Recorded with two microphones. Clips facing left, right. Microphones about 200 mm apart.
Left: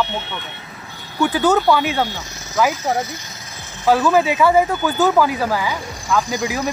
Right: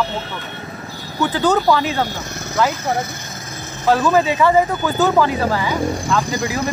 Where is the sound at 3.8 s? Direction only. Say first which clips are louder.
Even; 5° left (ahead or behind).